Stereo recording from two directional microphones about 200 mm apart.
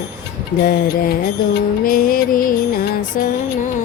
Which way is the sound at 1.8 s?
45° left (ahead or behind).